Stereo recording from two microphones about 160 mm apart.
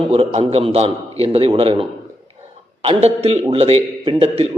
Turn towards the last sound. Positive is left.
turn(degrees=-35)  # may be behind; listen again after turning